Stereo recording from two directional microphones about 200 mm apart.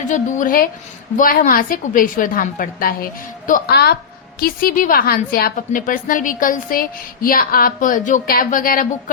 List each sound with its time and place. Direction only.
0.1 s a woman's voice: 40° left (ahead or behind)